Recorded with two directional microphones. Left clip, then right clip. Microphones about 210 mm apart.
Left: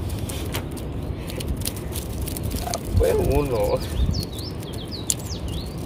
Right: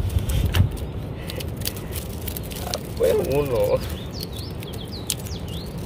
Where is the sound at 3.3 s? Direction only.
5° left (ahead or behind).